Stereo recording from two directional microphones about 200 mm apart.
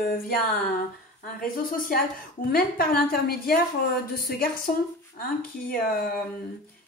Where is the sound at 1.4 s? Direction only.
45° left (ahead or behind).